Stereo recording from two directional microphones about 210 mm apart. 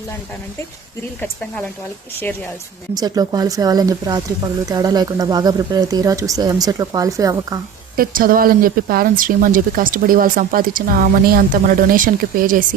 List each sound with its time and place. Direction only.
2.9 s speech: 20° right (ahead or behind)
7.9 s speech: 45° right (ahead or behind)